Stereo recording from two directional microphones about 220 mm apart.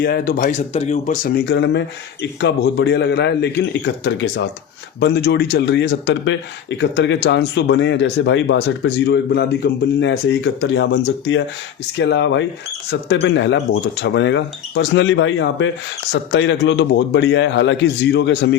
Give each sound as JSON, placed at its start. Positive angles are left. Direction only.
{"t": 0.0, "sound": "speech", "side_deg": 40}
{"t": 1.5, "sound": "speech", "side_deg": 55}